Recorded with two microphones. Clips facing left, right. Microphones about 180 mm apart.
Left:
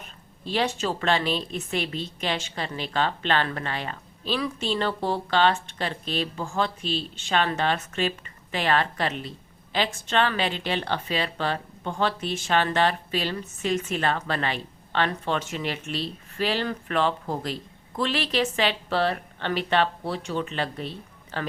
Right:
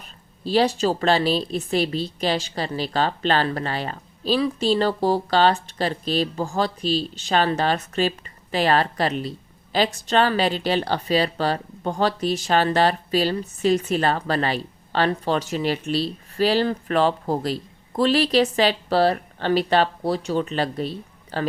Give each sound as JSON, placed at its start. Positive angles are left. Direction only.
{"t": 0.0, "sound": "a woman's voice", "side_deg": -35}